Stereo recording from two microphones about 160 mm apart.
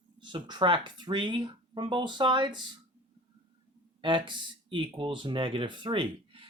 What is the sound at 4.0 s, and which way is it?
Speech, 30° right (ahead or behind).